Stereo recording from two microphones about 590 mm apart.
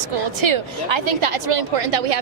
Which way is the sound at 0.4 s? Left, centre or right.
Right.